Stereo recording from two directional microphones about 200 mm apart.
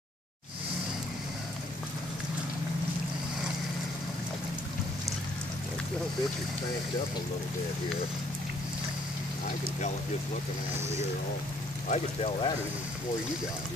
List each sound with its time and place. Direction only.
11.9 s speech: 30° left (ahead or behind)